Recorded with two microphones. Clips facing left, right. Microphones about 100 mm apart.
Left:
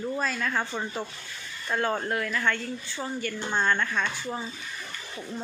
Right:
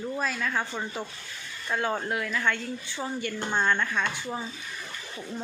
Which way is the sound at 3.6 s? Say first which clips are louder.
Even; 5° right (ahead or behind).